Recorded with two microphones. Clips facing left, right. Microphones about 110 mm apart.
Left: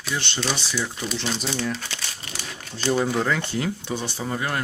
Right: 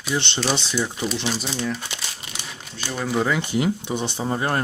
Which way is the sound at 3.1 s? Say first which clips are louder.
Right 2 dB; 5° right (ahead or behind).